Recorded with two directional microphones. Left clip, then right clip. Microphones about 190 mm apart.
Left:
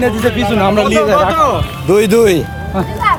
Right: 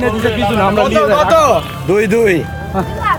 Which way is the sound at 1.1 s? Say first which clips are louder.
Right 2 dB; 50° right (ahead or behind).